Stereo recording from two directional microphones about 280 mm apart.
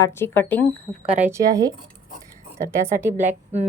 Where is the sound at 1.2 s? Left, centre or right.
Centre.